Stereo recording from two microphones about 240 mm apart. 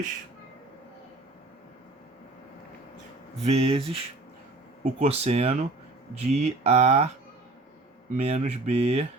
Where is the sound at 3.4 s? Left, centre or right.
Right.